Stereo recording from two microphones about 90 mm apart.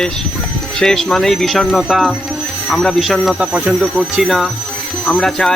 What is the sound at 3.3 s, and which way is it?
Speech, 15° right (ahead or behind).